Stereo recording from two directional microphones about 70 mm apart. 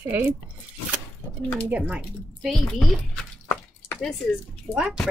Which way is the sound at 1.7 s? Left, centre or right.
Centre.